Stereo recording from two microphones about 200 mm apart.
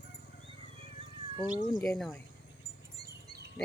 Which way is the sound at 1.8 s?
Centre (ahead or behind).